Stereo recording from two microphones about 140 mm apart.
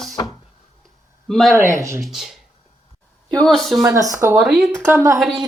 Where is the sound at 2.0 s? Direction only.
Centre (ahead or behind).